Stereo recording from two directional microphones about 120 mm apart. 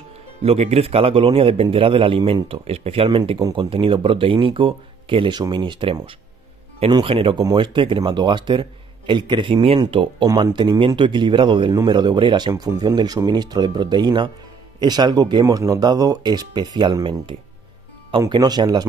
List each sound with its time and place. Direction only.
0.4 s speech: 60° right (ahead or behind); by 18.9 s 35° right (ahead or behind)